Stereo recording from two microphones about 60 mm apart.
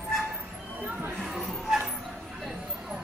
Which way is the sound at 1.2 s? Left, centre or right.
Centre.